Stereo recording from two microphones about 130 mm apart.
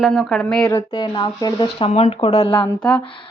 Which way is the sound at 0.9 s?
40° left (ahead or behind).